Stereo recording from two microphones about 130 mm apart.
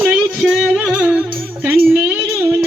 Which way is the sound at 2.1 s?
15° right (ahead or behind).